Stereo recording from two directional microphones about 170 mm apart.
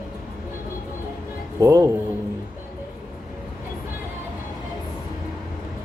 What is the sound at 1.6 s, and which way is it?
Speech, 20° right (ahead or behind).